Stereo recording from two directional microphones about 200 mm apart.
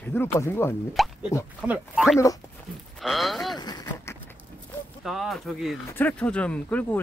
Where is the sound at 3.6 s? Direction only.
20° left (ahead or behind).